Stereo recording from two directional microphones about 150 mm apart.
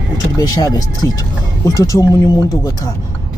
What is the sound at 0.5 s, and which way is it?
Speech, 25° left (ahead or behind).